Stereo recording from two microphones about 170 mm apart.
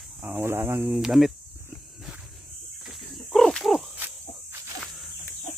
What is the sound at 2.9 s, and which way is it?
Snake, centre (ahead or behind).